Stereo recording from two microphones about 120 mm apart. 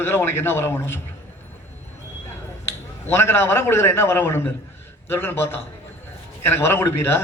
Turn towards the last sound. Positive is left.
turn(degrees=20)  # may be behind; listen again after turning